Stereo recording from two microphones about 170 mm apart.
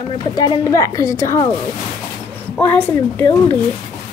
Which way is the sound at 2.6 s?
10° left (ahead or behind).